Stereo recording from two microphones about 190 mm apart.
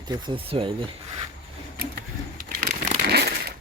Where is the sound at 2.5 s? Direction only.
45° right (ahead or behind).